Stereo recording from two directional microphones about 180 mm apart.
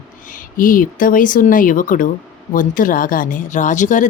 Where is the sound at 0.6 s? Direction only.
50° left (ahead or behind).